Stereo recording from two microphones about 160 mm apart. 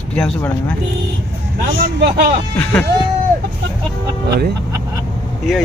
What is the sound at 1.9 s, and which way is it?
Speech, 90° right.